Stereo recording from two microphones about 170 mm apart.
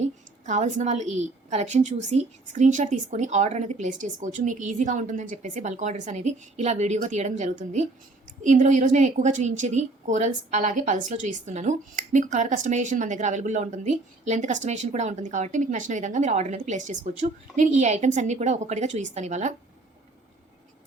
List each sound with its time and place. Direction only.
0.0 s a woman's voice: 45° right (ahead or behind)